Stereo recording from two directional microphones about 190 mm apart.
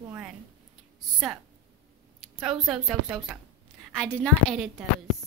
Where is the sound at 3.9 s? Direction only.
5° left (ahead or behind).